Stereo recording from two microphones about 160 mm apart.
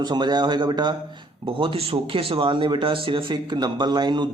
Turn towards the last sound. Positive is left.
turn(degrees=-25)  # may be behind; listen again after turning